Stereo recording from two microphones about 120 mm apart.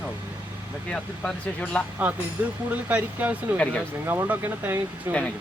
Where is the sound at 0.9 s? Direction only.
10° left (ahead or behind).